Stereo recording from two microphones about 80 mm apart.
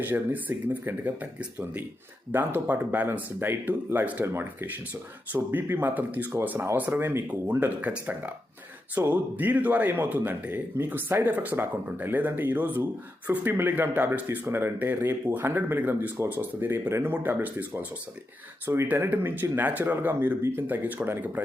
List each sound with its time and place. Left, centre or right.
0.0 s speech: right
5.3 s speech: right